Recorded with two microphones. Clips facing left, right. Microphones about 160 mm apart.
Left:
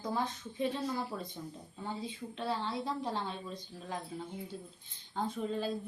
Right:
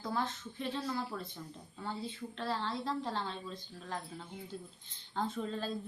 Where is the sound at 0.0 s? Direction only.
15° left (ahead or behind).